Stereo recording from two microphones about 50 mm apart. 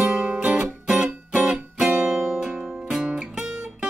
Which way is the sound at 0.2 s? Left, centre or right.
Right.